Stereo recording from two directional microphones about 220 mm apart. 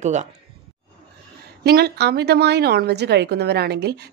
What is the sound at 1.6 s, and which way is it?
A woman's voice, 45° right (ahead or behind).